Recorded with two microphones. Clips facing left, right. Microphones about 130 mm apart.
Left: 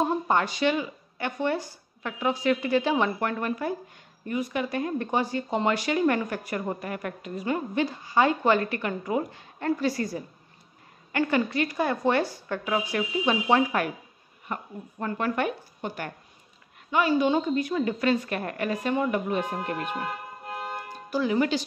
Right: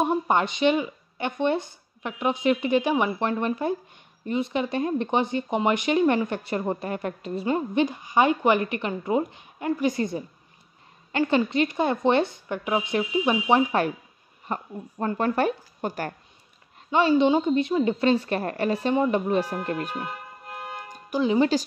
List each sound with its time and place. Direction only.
0.0 s speech: 20° right (ahead or behind); by 16.1 s 40° right (ahead or behind)
17.1 s speech: 20° right (ahead or behind); by 20.0 s 35° right (ahead or behind)
20.9 s speech: 20° right (ahead or behind)